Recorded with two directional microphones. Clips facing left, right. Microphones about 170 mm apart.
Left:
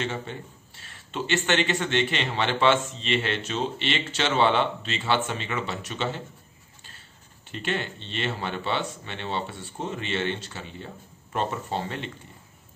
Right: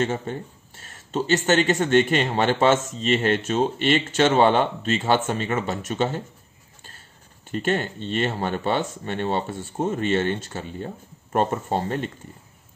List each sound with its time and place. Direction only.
0.0 s speech: 45° right (ahead or behind)
7.4 s speech: 45° right (ahead or behind)